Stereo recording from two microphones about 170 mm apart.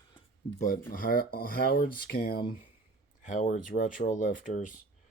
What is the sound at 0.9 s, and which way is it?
Speech, 55° left (ahead or behind).